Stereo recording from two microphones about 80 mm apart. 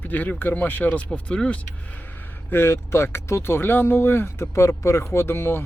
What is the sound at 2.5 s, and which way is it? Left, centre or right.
Speech, left.